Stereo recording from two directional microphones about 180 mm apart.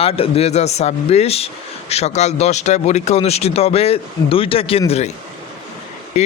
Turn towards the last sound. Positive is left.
turn(degrees=40)  # may be behind; listen again after turning